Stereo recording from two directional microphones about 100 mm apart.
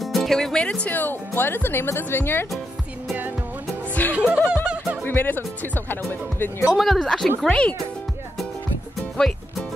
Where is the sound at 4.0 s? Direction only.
20° left (ahead or behind).